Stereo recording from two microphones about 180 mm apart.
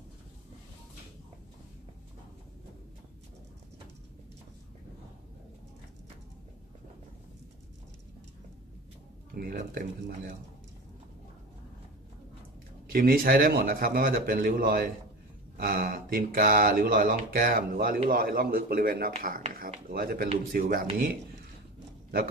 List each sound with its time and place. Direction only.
9.3 s speech: 55° right (ahead or behind)
12.9 s a man's voice: 50° right (ahead or behind)